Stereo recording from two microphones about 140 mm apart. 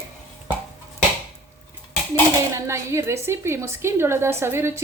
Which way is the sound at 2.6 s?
20° right (ahead or behind).